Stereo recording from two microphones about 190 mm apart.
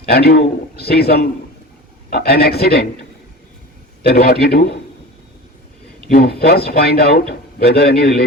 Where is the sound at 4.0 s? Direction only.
55° left (ahead or behind).